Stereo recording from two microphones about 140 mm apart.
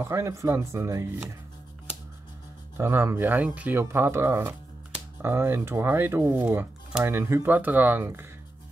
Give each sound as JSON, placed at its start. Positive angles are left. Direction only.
{"t": 0.0, "sound": "speech", "side_deg": -20}
{"t": 2.8, "sound": "speech", "side_deg": -20}